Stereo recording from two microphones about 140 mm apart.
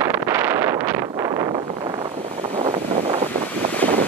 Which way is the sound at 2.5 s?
45° right (ahead or behind).